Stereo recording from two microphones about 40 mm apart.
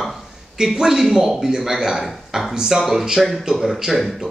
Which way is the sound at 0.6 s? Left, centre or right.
Centre.